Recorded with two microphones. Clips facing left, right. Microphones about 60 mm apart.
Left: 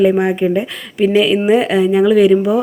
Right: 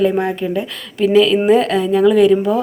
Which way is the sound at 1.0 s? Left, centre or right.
Centre.